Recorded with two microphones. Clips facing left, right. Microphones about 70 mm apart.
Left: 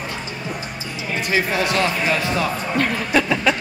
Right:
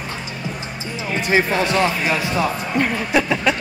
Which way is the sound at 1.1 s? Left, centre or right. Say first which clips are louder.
Right 3 dB; right.